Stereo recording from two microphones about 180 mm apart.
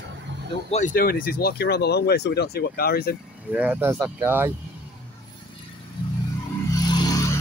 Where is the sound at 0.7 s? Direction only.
45° left (ahead or behind); by 3.2 s 60° left (ahead or behind).